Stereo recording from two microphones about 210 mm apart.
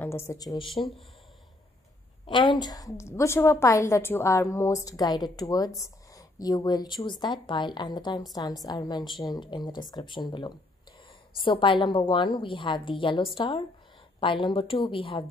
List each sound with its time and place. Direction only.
0.0 s a woman's voice: 10° left (ahead or behind)
2.2 s a woman's voice: 20° left (ahead or behind)